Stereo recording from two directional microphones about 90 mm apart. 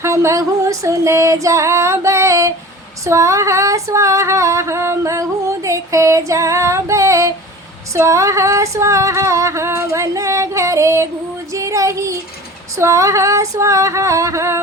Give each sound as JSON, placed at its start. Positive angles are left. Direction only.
{"t": 0.0, "sound": "female singing", "side_deg": -35}